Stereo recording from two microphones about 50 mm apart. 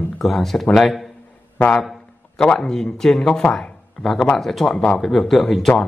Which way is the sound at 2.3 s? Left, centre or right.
Centre.